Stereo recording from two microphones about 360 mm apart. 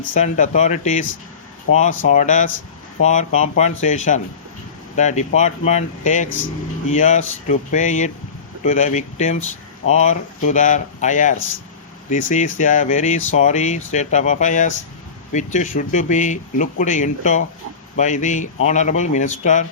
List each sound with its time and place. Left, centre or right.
0.0 s speech: left